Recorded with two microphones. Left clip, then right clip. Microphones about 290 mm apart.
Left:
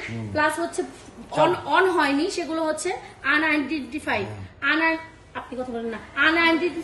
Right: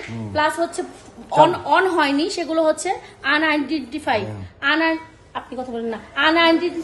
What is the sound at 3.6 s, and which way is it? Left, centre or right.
Speech, right.